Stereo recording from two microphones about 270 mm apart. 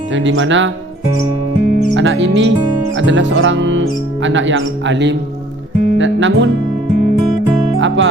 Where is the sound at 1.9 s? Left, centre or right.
Right.